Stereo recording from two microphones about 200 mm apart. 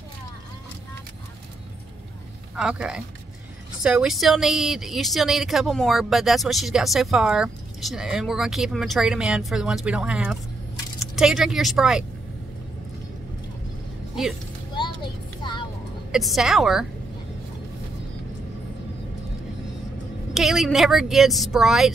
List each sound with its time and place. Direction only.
2.5 s speech: 5° right (ahead or behind)
15.4 s vehicle: 20° left (ahead or behind)
16.1 s speech: centre (ahead or behind)
20.3 s speech: centre (ahead or behind)